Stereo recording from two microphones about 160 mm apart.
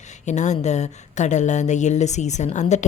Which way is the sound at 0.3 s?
45° left (ahead or behind).